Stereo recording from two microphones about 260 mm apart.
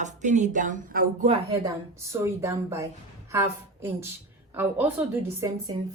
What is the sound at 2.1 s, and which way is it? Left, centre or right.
A woman's voice, centre.